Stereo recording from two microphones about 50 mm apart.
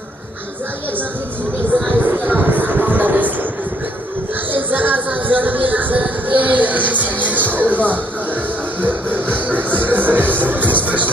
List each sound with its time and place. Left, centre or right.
1.9 s music: right
4.6 s a sound: right
8.8 s music: right